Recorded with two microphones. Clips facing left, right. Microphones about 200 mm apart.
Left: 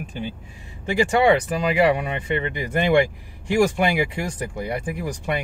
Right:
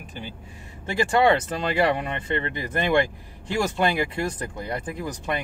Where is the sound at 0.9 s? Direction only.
15° left (ahead or behind).